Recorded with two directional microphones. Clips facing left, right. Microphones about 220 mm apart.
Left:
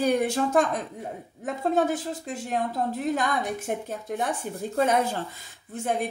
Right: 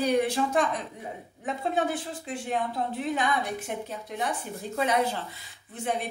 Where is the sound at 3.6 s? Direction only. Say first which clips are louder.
Left 4 dB; 50° left (ahead or behind).